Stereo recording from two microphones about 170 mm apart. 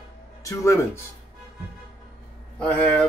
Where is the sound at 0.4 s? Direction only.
20° left (ahead or behind).